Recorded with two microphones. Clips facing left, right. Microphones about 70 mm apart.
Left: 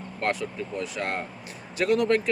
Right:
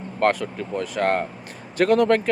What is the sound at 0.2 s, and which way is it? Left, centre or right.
Speech, right.